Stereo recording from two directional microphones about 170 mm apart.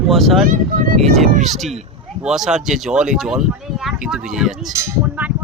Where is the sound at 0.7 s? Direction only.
55° right (ahead or behind).